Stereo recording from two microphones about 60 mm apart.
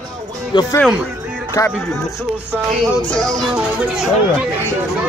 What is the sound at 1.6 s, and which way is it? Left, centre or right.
Speech, left.